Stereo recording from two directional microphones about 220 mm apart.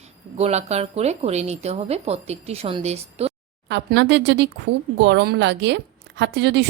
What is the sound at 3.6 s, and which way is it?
A woman's voice, 55° right (ahead or behind).